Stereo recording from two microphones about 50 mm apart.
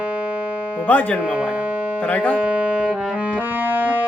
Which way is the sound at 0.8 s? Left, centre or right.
Left.